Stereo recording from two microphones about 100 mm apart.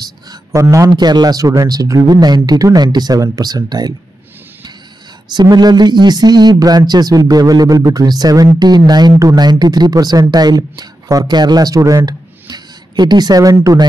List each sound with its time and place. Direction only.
0.0 s a man's voice: 35° right (ahead or behind)
0.9 s speech: 45° right (ahead or behind)
5.3 s speech: 45° right (ahead or behind)